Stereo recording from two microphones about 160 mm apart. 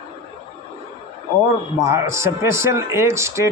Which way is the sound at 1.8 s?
15° right (ahead or behind).